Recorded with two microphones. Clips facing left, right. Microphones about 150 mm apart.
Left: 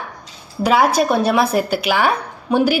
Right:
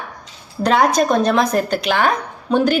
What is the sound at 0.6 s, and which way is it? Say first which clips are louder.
Speech: even; 5° left (ahead or behind).